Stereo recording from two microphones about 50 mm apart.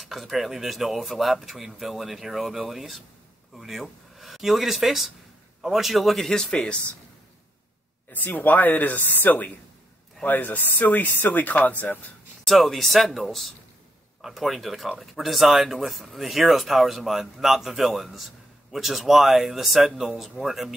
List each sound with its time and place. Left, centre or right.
0.0 s speech: centre
8.1 s speech: left
12.4 s speech: centre